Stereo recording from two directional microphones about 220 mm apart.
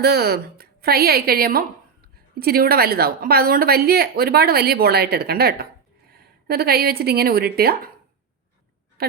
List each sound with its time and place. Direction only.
0.0 s a woman's voice: 45° right (ahead or behind)
9.0 s speech: 45° right (ahead or behind)